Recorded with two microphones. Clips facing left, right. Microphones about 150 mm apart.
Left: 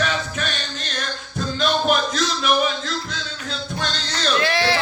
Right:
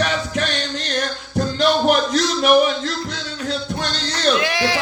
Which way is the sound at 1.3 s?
70° right (ahead or behind).